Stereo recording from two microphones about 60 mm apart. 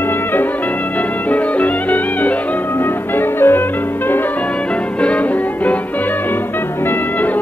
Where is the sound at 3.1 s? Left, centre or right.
Left.